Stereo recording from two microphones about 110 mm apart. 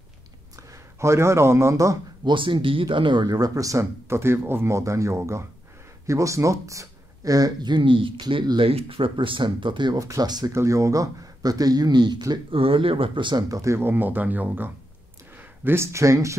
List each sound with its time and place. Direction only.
0.6 s speech: 25° right (ahead or behind)
2.2 s speech: 50° right (ahead or behind)
9.9 s speech: 30° right (ahead or behind)
12.4 s speech: 55° right (ahead or behind)
13.5 s speech: 30° right (ahead or behind)